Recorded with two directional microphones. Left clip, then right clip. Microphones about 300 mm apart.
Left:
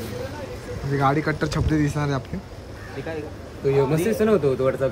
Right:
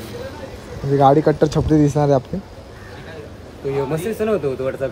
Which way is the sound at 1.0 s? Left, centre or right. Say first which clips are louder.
Right 9 dB; centre.